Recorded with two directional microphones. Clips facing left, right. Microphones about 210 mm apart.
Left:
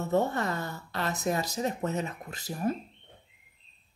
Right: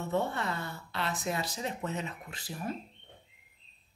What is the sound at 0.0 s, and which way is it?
Speech, 40° left (ahead or behind).